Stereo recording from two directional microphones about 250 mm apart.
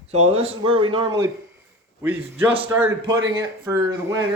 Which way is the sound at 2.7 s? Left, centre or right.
Centre.